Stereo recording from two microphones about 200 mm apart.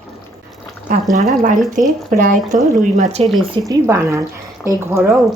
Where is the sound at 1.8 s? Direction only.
40° right (ahead or behind).